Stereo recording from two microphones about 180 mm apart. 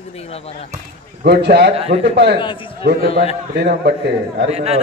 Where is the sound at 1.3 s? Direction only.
65° right (ahead or behind).